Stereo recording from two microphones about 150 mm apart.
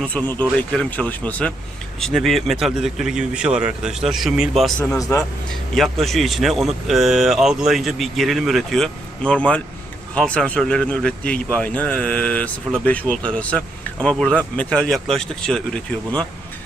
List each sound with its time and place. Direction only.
0.0 s speech: 10° left (ahead or behind)
5.7 s speech: centre (ahead or behind)